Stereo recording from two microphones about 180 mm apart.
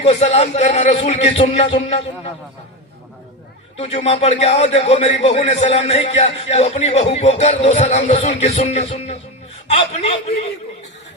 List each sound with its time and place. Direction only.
0.0 s speech: 35° left (ahead or behind)
3.8 s speech: 35° left (ahead or behind)